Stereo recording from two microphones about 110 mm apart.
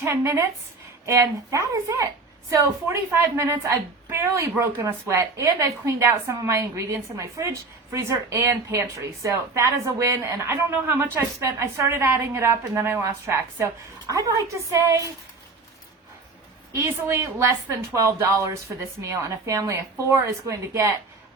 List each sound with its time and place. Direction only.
0.0 s a woman's voice: 25° right (ahead or behind)
16.7 s a woman's voice: 20° right (ahead or behind)